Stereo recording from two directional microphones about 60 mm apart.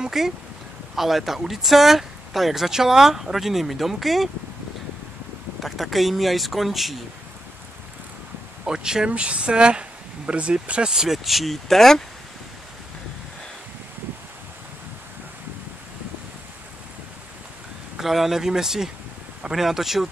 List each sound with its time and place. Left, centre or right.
0.0 s speech: centre
5.6 s speech: centre
8.6 s speech: centre
17.9 s speech: centre